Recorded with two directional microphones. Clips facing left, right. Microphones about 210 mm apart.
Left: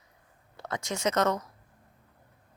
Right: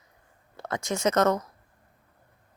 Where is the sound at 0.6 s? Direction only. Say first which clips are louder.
Right 4 dB; 50° right (ahead or behind).